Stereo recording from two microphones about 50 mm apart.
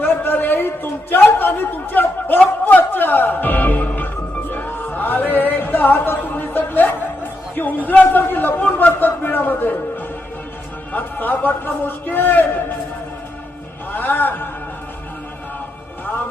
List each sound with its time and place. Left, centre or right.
0.0 s a sound: left
1.4 s a man's voice: left
2.6 s music: left
7.5 s a man's voice: left
10.9 s a man's voice: left
13.9 s a man's voice: left